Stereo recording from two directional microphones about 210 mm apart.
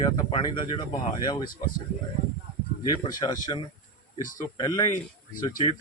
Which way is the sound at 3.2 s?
20° left (ahead or behind).